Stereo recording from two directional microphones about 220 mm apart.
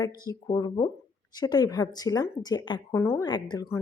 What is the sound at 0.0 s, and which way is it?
Speech, 15° left (ahead or behind).